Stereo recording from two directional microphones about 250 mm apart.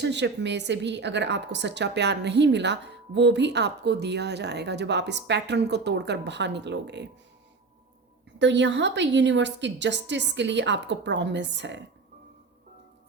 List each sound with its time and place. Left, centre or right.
0.0 s a woman's voice: right
8.4 s a woman's voice: right